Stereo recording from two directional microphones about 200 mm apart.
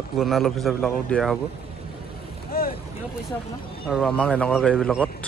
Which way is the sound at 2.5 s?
45° left (ahead or behind).